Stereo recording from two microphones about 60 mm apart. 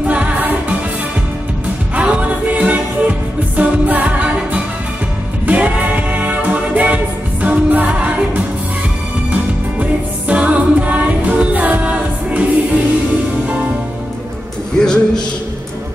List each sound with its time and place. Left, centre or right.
0.0 s music: right
2.0 s music: right
14.8 s music: centre